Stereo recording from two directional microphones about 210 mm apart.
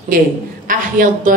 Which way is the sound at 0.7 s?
40° right (ahead or behind).